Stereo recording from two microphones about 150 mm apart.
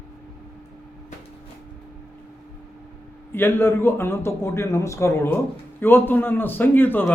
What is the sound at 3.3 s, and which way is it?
A man's voice, 15° left (ahead or behind).